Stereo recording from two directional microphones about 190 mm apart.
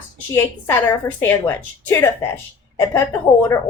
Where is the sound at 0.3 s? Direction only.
10° left (ahead or behind).